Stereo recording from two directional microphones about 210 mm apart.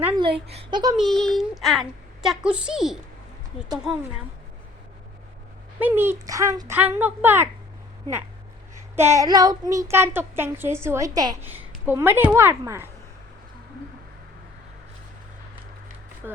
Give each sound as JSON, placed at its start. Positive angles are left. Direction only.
{"t": 0.2, "sound": "speech", "side_deg": -25}
{"t": 0.9, "sound": "speech", "side_deg": 0}
{"t": 5.8, "sound": "a child's voice", "side_deg": -10}
{"t": 9.0, "sound": "a child's voice", "side_deg": -15}
{"t": 16.2, "sound": "speech", "side_deg": -10}